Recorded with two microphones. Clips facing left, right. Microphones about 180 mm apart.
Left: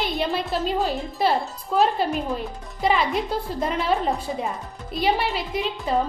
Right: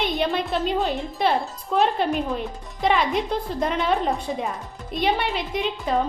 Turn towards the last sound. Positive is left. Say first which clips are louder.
# even
turn(degrees=0)  # may be behind; listen again after turning